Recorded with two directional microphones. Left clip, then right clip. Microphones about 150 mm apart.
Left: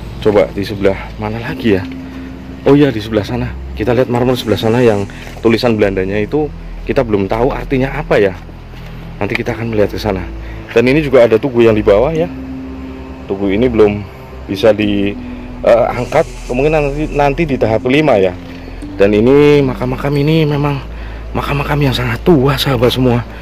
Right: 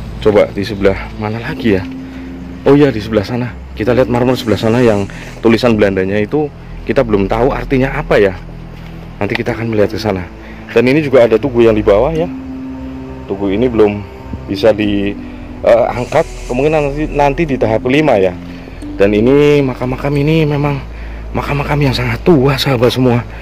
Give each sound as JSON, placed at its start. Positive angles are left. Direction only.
{"t": 0.2, "sound": "a man's voice", "side_deg": -30}
{"t": 9.4, "sound": "a man's voice", "side_deg": -25}
{"t": 13.3, "sound": "a man's voice", "side_deg": -5}